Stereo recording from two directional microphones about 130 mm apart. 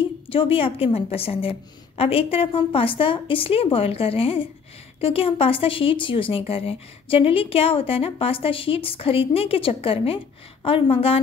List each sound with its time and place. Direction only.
0.3 s speech: 45° left (ahead or behind)